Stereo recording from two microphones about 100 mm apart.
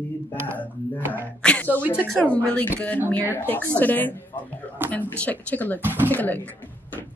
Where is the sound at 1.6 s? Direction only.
15° right (ahead or behind).